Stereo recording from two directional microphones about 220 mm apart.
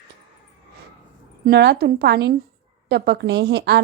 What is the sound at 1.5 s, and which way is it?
A woman's voice, 50° right (ahead or behind).